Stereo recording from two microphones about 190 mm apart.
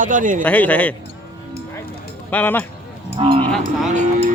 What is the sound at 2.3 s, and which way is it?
Speech, 10° left (ahead or behind).